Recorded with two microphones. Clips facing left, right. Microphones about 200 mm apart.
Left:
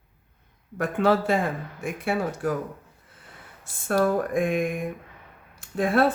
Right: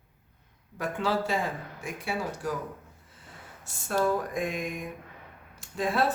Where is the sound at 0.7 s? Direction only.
55° left (ahead or behind).